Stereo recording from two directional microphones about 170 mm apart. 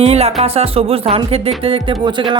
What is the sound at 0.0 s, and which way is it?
Speech, 40° right (ahead or behind).